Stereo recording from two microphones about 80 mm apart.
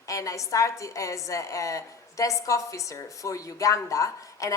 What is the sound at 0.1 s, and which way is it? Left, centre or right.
A woman's voice, left.